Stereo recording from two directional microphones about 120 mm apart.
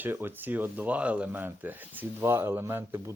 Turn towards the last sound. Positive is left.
turn(degrees=-20)  # may be behind; listen again after turning